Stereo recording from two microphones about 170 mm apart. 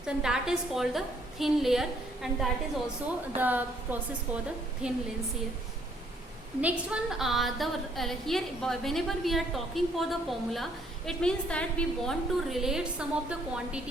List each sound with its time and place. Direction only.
0.0 s a woman's voice: 5° right (ahead or behind)
4.8 s a woman's voice: 5° right (ahead or behind)
6.6 s a woman's voice: 5° right (ahead or behind)